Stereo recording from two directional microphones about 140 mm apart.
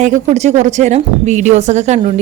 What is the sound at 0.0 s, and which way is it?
A woman's voice, 55° right (ahead or behind).